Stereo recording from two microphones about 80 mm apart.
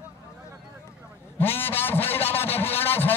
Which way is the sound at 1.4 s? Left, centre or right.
Left.